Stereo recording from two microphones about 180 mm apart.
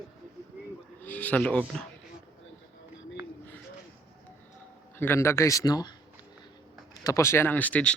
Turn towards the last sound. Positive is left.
turn(degrees=10)  # may be behind; listen again after turning